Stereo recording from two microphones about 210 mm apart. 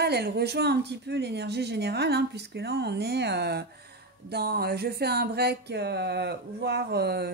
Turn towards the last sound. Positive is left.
turn(degrees=-50)  # may be behind; listen again after turning